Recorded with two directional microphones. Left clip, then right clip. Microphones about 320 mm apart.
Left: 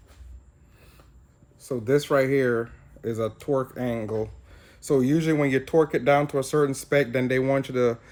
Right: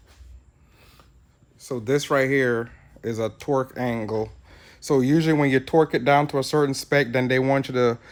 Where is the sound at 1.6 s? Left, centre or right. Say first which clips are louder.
Even; centre.